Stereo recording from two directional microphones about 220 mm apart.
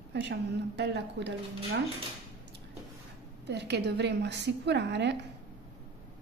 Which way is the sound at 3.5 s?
50° right (ahead or behind).